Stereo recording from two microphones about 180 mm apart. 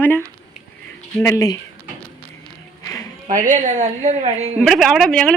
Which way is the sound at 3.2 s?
45° right (ahead or behind).